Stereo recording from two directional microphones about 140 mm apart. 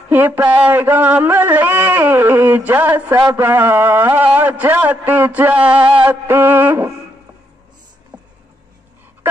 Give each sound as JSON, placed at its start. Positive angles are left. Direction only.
{"t": 0.1, "sound": "a man's voice", "side_deg": -15}
{"t": 3.2, "sound": "a man's voice", "side_deg": -25}
{"t": 3.4, "sound": "a man's voice", "side_deg": -15}
{"t": 8.1, "sound": "a sound", "side_deg": -25}